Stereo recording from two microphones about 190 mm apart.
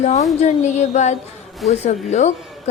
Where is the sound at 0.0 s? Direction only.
35° left (ahead or behind).